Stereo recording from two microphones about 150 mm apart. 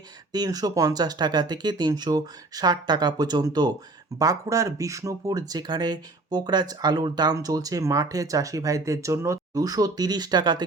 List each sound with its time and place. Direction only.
0.3 s speech: 25° right (ahead or behind)